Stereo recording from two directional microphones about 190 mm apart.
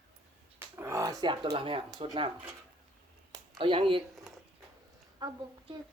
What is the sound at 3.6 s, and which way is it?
Speech, 25° right (ahead or behind).